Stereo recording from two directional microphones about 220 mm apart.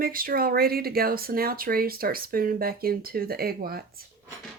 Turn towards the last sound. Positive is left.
turn(degrees=-45)  # may be behind; listen again after turning